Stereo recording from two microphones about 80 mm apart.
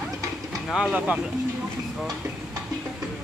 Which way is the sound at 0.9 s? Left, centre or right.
Centre.